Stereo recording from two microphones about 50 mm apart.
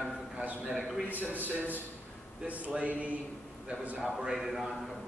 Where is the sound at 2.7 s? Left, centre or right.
Right.